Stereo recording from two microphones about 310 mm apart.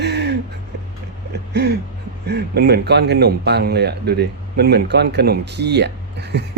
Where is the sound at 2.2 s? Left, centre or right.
Right.